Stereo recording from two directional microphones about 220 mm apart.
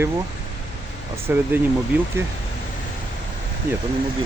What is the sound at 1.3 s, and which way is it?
Speech, 10° right (ahead or behind).